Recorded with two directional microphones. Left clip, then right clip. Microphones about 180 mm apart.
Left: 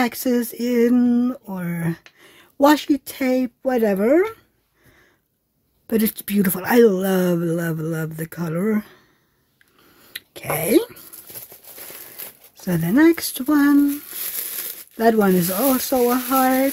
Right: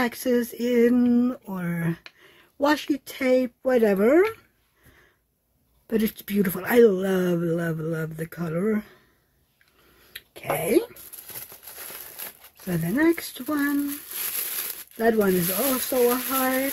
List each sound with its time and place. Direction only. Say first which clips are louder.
0.0 s speech: left 3 dB; 35° left (ahead or behind); by 4.4 s 15° left (ahead or behind)
5.9 s speech: left 4 dB; 35° left (ahead or behind)
10.1 s speech: left 2 dB; 40° left (ahead or behind)
12.6 s speech: left 6 dB; 45° left (ahead or behind)
15.0 s speech: left 5 dB; 45° left (ahead or behind)